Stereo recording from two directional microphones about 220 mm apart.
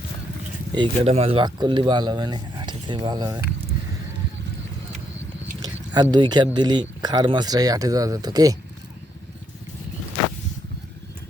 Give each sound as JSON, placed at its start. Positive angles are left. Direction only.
{"t": 0.7, "sound": "speech", "side_deg": -25}
{"t": 5.6, "sound": "speech", "side_deg": -20}